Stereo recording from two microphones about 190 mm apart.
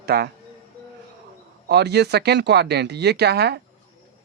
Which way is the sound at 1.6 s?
60° right (ahead or behind).